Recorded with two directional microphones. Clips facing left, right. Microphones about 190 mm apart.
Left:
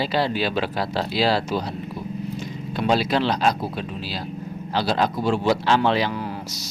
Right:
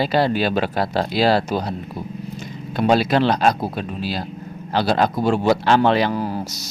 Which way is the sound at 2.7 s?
50° right (ahead or behind).